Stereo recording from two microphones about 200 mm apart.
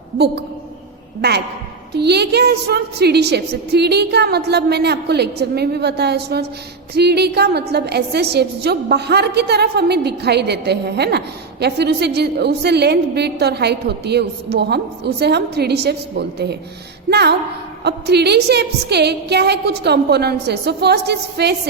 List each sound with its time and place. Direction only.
1.9 s a woman's voice: 55° right (ahead or behind)